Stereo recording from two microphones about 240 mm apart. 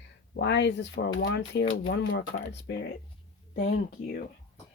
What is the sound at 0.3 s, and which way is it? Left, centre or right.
Speech, left.